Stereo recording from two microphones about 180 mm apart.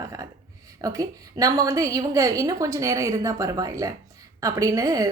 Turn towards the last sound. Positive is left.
turn(degrees=-20)  # may be behind; listen again after turning